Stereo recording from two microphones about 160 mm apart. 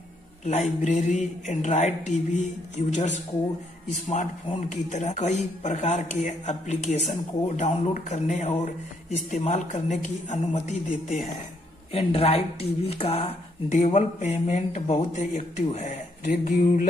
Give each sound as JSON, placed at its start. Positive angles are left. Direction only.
{"t": 0.5, "sound": "speech", "side_deg": 50}